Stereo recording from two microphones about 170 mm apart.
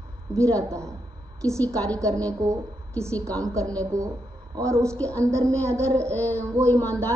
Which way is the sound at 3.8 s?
20° right (ahead or behind).